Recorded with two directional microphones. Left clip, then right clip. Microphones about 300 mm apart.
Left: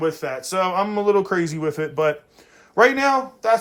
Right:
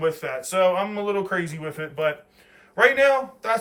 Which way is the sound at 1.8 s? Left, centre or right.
Centre.